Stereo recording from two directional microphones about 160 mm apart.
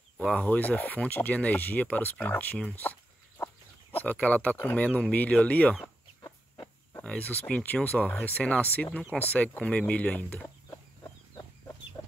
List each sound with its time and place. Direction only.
0.2 s speech: 5° left (ahead or behind)
6.2 s chicken: 25° left (ahead or behind)
7.0 s speech: 10° left (ahead or behind)